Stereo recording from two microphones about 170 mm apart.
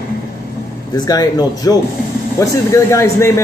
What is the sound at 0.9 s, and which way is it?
Speech, 20° left (ahead or behind).